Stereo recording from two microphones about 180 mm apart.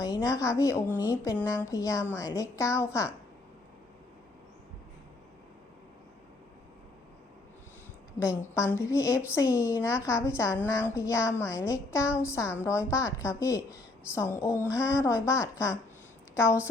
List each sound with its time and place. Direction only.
0.0 s a woman's voice: 15° left (ahead or behind)
8.4 s a woman's voice: 15° left (ahead or behind)
9.0 s a woman's voice: 5° right (ahead or behind)
10.1 s a woman's voice: 15° left (ahead or behind)
16.3 s a woman's voice: 5° right (ahead or behind)